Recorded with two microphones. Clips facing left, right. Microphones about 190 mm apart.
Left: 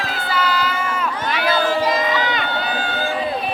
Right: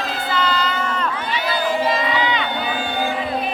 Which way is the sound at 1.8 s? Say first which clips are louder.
Even; 45° left (ahead or behind).